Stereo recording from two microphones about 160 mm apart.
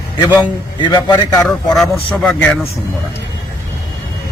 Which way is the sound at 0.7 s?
25° left (ahead or behind).